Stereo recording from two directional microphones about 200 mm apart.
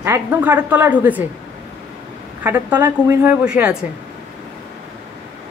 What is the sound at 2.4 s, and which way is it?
Speech, 10° right (ahead or behind).